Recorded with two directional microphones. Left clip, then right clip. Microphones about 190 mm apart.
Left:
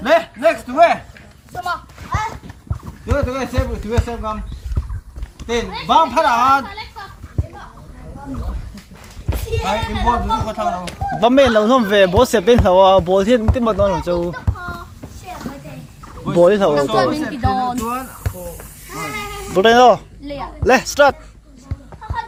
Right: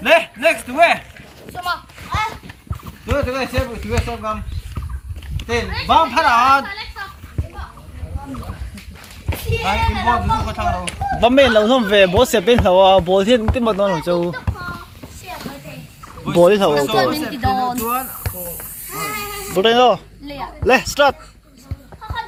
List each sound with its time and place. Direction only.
0.1 s speech: 35° right (ahead or behind)
1.5 s a sound: 15° right (ahead or behind)
3.2 s speech: centre (ahead or behind)
3.9 s speech: 20° right (ahead or behind)
5.9 s speech: centre (ahead or behind)
9.5 s speech: 10° left (ahead or behind); by 14.4 s 20° right (ahead or behind)
16.4 s speech: 10° right (ahead or behind)
16.7 s a sound: 50° right (ahead or behind)
19.5 s speech: 5° left (ahead or behind)
20.2 s a sound: 55° right (ahead or behind)
20.7 s speech: centre (ahead or behind)